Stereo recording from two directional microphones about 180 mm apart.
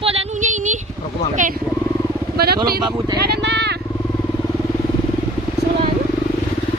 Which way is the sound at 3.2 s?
65° right (ahead or behind).